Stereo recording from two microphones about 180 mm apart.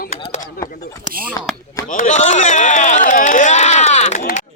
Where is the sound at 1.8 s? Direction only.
45° left (ahead or behind).